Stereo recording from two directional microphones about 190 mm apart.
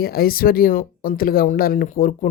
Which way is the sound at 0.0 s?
55° left (ahead or behind).